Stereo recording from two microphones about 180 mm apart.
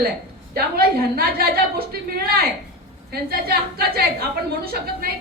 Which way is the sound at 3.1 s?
55° right (ahead or behind).